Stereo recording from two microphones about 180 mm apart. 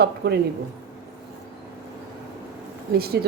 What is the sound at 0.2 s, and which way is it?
Speech, 65° right (ahead or behind).